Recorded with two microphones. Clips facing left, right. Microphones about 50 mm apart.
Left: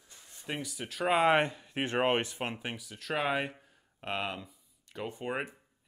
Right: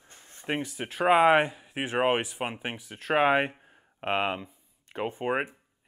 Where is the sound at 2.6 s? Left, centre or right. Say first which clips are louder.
Right 4 dB; right.